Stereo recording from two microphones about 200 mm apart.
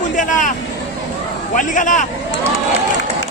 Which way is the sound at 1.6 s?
40° left (ahead or behind).